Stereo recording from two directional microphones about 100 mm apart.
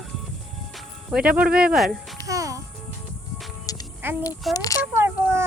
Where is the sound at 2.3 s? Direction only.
35° right (ahead or behind).